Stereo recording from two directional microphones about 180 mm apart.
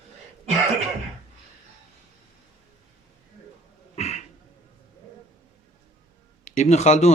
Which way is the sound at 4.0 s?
35° left (ahead or behind).